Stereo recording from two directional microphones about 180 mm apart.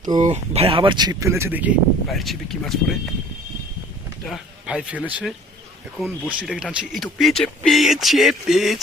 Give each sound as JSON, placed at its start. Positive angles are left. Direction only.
{"t": 0.2, "sound": "speech", "side_deg": -35}
{"t": 2.0, "sound": "speech", "side_deg": 0}
{"t": 4.3, "sound": "speech", "side_deg": -5}